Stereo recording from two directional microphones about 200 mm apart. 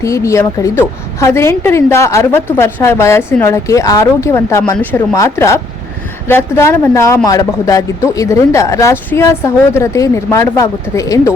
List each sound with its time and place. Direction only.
0.0 s speech: 15° left (ahead or behind)